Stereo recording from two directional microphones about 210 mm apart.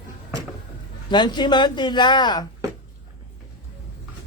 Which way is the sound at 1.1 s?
20° left (ahead or behind).